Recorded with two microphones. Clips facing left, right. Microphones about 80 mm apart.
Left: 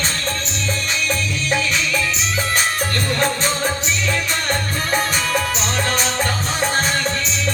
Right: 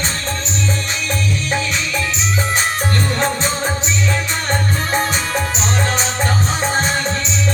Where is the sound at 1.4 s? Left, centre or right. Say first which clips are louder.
Left 3 dB; right.